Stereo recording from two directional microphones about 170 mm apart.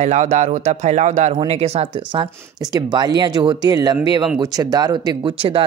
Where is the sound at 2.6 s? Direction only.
25° right (ahead or behind).